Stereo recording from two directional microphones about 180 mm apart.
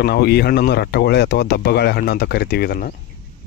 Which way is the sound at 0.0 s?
65° left (ahead or behind).